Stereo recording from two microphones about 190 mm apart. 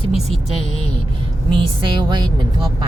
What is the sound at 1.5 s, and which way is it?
Speech, 25° right (ahead or behind).